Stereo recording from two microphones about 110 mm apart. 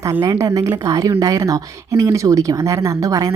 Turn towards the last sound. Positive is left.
turn(degrees=-35)  # may be behind; listen again after turning